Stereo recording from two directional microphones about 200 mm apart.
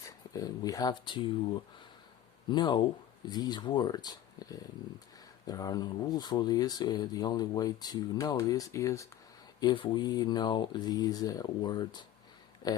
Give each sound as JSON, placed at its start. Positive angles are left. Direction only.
{"t": 0.3, "sound": "speech", "side_deg": 20}
{"t": 2.5, "sound": "speech", "side_deg": 20}